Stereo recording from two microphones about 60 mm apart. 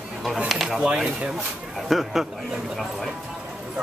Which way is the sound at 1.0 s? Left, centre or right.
Centre.